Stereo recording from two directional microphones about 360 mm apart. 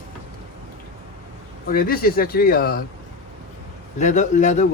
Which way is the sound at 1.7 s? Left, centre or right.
Left.